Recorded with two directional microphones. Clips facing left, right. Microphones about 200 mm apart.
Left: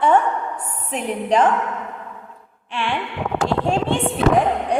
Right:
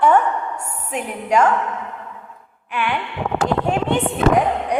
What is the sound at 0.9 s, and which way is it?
Speech, 35° left (ahead or behind).